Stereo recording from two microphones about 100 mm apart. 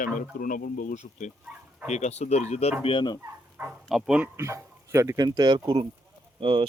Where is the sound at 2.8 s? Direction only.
55° left (ahead or behind).